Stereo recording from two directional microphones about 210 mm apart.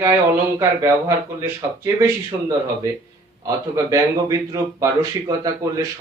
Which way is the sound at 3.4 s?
15° right (ahead or behind).